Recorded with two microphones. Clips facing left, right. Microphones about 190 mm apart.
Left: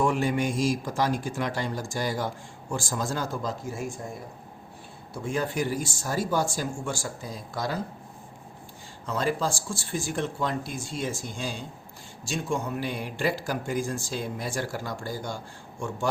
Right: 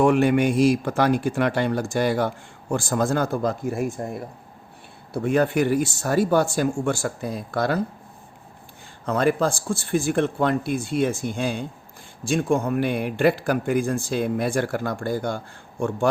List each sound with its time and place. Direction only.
0.0 s speech: 65° right (ahead or behind)
9.0 s speech: 60° right (ahead or behind)